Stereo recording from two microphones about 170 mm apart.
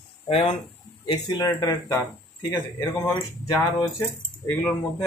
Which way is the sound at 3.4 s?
20° left (ahead or behind).